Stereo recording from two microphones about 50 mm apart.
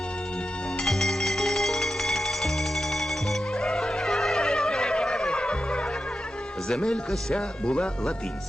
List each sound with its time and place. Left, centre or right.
0.9 s music: centre
6.7 s speech: centre